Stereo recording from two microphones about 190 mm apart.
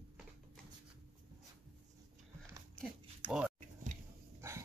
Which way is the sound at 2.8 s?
5° right (ahead or behind).